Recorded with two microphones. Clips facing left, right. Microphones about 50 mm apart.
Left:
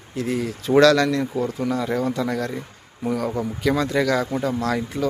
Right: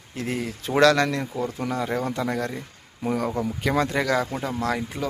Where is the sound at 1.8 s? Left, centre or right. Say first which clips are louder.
Left 1 dB; centre.